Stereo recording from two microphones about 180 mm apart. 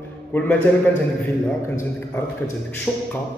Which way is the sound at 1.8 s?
15° left (ahead or behind).